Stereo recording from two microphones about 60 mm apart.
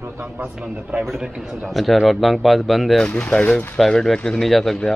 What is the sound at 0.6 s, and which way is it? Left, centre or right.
Speech, right.